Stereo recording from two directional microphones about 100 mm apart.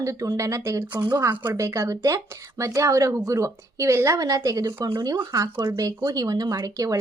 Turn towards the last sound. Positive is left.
turn(degrees=-35)  # may be behind; listen again after turning